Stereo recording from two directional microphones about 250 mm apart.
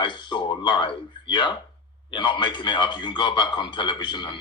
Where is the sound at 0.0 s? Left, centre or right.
Centre.